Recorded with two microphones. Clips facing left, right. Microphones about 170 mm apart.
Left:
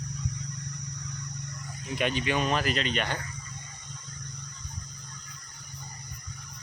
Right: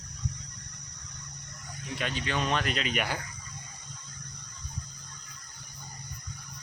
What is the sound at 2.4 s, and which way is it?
Speech, centre (ahead or behind).